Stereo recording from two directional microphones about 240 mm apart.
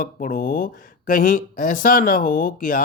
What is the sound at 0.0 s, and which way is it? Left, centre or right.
Speech, left.